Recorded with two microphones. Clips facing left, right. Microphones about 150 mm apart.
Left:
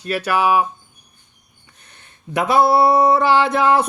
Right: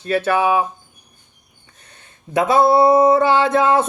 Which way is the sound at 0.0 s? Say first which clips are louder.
Right 2 dB; 25° right (ahead or behind).